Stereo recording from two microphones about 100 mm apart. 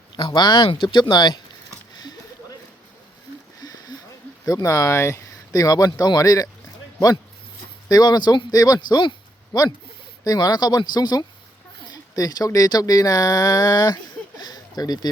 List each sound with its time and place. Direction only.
0.2 s speech: 50° left (ahead or behind)
2.0 s a sound: 45° left (ahead or behind)
3.6 s a sound: 40° left (ahead or behind)
4.4 s speech: 35° left (ahead or behind)
7.9 s speech: 40° left (ahead or behind)
10.2 s speech: 40° left (ahead or behind)